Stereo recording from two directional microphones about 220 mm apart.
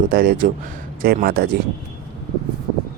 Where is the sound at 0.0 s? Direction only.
40° right (ahead or behind).